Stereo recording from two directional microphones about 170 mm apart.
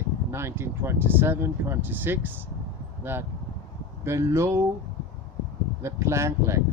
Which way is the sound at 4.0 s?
15° right (ahead or behind).